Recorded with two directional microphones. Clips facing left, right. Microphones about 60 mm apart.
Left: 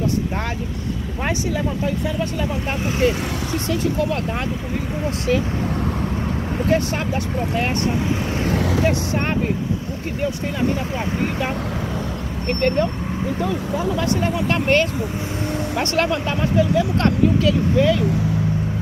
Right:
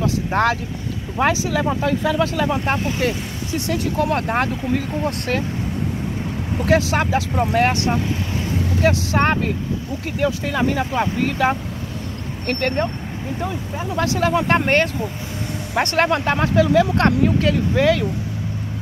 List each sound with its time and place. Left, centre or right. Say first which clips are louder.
0.3 s speech: right 8 dB; right
1.2 s speech: right 5 dB; right
3.6 s speech: right 1 dB; right
6.6 s speech: right 3 dB; right
7.3 s speech: right 5 dB; right
12.4 s speech: left 2 dB; right
14.0 s speech: right 2 dB; right
14.5 s speech: right 1 dB; right
16.3 s speech: right 2 dB; right
17.0 s speech: even; right
17.7 s speech: right 1 dB; right